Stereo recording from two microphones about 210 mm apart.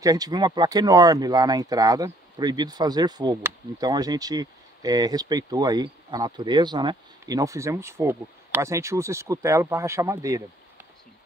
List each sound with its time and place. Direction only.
0.0 s speech: 15° right (ahead or behind)